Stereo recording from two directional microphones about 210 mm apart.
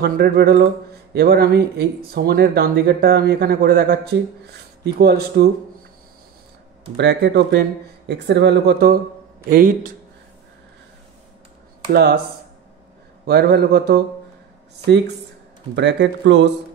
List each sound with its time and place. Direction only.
0.0 s speech: 50° right (ahead or behind)
6.8 s speech: 55° right (ahead or behind)
11.9 s speech: 50° right (ahead or behind)
13.3 s speech: 50° right (ahead or behind)
15.7 s speech: 55° right (ahead or behind)